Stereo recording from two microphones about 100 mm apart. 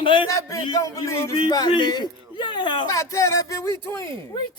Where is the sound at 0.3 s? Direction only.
35° left (ahead or behind).